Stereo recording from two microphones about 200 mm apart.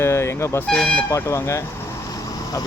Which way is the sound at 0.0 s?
15° left (ahead or behind).